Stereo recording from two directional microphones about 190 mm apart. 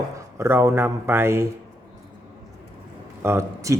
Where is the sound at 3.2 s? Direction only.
15° right (ahead or behind).